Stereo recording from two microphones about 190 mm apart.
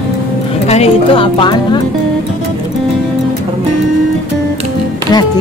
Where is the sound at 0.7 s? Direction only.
30° left (ahead or behind).